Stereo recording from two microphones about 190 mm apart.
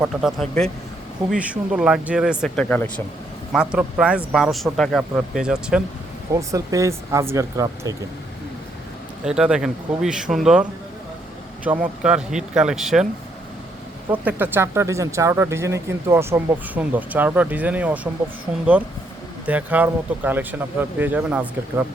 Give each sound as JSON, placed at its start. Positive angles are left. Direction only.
{"t": 0.0, "sound": "speech", "side_deg": 0}
{"t": 3.5, "sound": "speech", "side_deg": -5}
{"t": 6.5, "sound": "speech", "side_deg": -15}
{"t": 9.2, "sound": "speech", "side_deg": -5}
{"t": 14.1, "sound": "speech", "side_deg": -10}
{"t": 19.5, "sound": "speech", "side_deg": -10}